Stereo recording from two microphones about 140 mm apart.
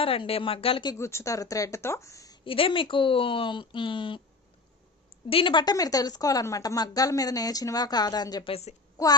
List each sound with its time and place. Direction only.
0.0 s speech: 40° left (ahead or behind)
0.9 s a woman's voice: 20° left (ahead or behind)
2.4 s speech: 40° left (ahead or behind)
5.3 s a woman's voice: 40° left (ahead or behind)